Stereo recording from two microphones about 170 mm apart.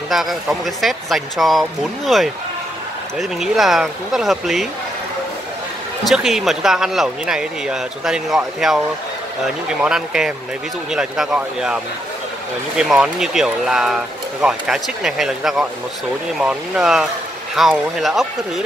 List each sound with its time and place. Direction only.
0.1 s speech: centre (ahead or behind)
6.0 s speech: centre (ahead or behind)